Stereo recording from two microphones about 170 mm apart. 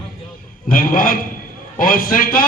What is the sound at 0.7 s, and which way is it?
A man's voice, 55° left (ahead or behind).